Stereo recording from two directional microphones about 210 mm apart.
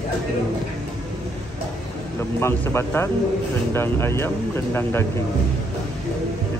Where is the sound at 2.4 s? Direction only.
10° left (ahead or behind).